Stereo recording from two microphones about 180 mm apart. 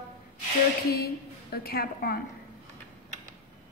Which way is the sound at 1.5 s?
55° left (ahead or behind).